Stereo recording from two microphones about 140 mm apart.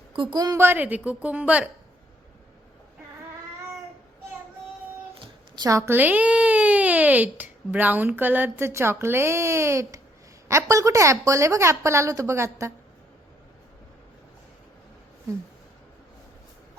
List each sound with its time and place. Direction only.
0.1 s a woman's voice: 35° right (ahead or behind); by 1.7 s 10° right (ahead or behind)
5.2 s a woman's voice: 25° right (ahead or behind)